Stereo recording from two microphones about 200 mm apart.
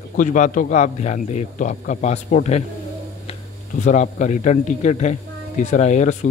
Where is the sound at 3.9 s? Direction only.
40° left (ahead or behind).